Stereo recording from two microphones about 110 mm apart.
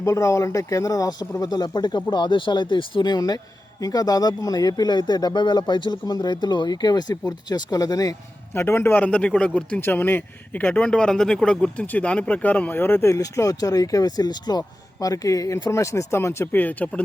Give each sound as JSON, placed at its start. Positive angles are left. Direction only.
{"t": 0.0, "sound": "speech", "side_deg": 30}
{"t": 8.5, "sound": "speech", "side_deg": 20}